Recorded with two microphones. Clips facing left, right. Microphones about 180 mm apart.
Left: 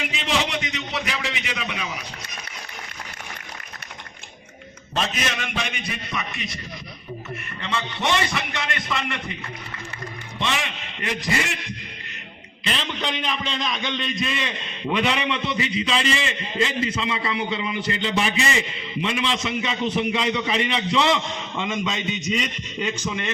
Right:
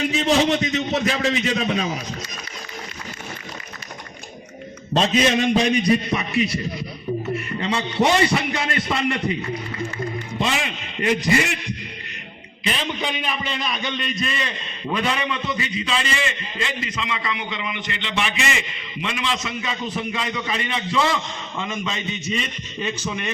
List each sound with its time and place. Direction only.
0.3 s a man's voice: 40° right (ahead or behind)
4.9 s a man's voice: 30° right (ahead or behind)
7.6 s a man's voice: 30° right (ahead or behind)
11.0 s a man's voice: 20° right (ahead or behind)
12.6 s a man's voice: 15° right (ahead or behind); by 14.9 s 5° left (ahead or behind)
14.9 s a man's voice: 15° left (ahead or behind)
23.0 s a man's voice: 10° right (ahead or behind)